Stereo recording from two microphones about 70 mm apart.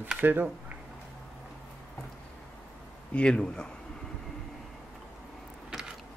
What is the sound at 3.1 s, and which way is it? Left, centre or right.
Speech, centre.